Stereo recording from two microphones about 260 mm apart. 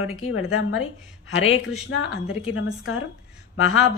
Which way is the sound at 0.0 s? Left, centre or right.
Left.